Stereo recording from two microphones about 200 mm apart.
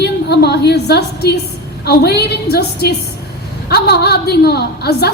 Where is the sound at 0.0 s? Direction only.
55° left (ahead or behind).